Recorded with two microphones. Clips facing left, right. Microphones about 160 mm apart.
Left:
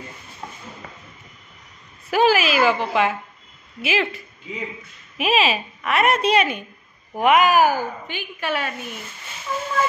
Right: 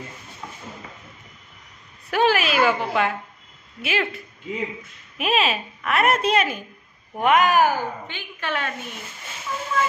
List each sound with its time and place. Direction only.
2.0 s a woman's voice: 5° left (ahead or behind)
9.5 s fowl: 40° left (ahead or behind)